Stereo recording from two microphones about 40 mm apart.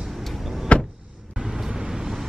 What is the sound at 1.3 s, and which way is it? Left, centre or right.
Vehicle, centre.